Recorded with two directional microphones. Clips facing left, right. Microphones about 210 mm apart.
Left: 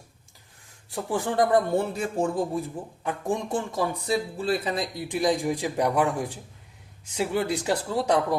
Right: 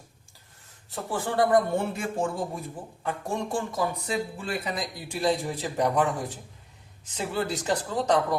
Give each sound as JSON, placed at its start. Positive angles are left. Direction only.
{"t": 0.9, "sound": "speech", "side_deg": 15}
{"t": 2.0, "sound": "speech", "side_deg": 35}
{"t": 3.0, "sound": "a man's voice", "side_deg": 15}
{"t": 4.0, "sound": "a man's voice", "side_deg": 35}